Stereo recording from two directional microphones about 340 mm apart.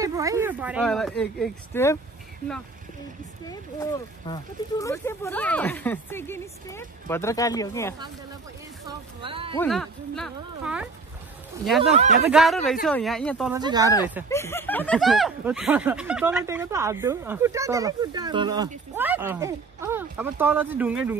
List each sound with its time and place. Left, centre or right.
0.0 s speech: centre
3.4 s speech: centre
8.8 s speech: centre
9.6 s speech: centre
11.9 s speech: right
12.3 s speech: centre
13.5 s speech: centre
14.3 s speech: centre